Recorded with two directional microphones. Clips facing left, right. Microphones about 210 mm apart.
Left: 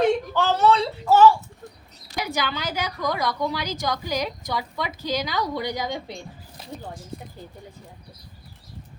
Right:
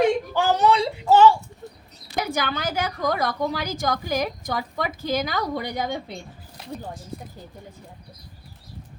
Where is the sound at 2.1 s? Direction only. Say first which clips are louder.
Right 2 dB; 50° right (ahead or behind).